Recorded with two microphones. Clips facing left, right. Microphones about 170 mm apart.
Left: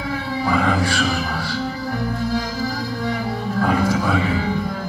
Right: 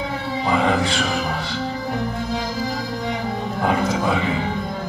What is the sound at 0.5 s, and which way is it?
Music, 20° right (ahead or behind).